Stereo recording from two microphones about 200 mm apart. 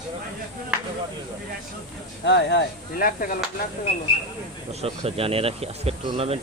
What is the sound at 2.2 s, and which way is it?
Speech, 60° left (ahead or behind).